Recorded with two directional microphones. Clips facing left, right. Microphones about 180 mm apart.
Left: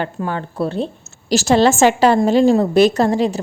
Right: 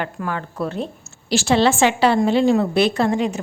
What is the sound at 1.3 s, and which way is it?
A woman's voice, 40° left (ahead or behind).